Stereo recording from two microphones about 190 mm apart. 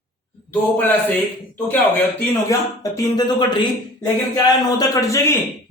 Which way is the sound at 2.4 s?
15° left (ahead or behind).